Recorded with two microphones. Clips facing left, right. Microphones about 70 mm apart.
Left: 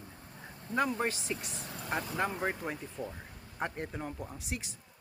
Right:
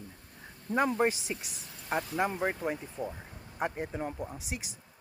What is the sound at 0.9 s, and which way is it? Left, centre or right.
Speech, centre.